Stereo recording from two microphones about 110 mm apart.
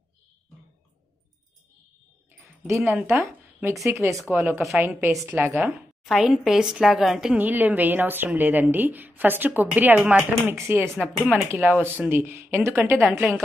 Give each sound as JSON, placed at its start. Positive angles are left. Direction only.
{"t": 2.6, "sound": "speech", "side_deg": -25}
{"t": 4.3, "sound": "a woman's voice", "side_deg": -15}
{"t": 5.6, "sound": "a woman's voice", "side_deg": 0}
{"t": 7.3, "sound": "a woman's voice", "side_deg": -15}
{"t": 12.9, "sound": "a woman's voice", "side_deg": 0}